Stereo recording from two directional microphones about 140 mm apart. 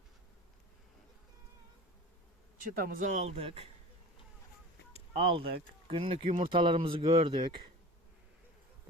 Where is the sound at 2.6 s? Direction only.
85° right; by 3.7 s 45° right (ahead or behind).